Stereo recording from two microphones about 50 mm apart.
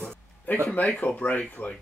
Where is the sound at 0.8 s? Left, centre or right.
Left.